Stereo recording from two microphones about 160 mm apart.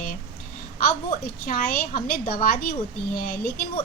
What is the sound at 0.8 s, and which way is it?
A woman's voice, 70° left (ahead or behind).